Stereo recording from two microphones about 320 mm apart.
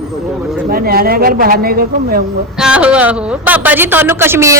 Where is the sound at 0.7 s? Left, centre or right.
Right.